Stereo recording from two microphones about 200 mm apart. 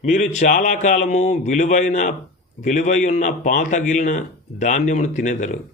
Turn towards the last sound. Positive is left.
turn(degrees=35)  # may be behind; listen again after turning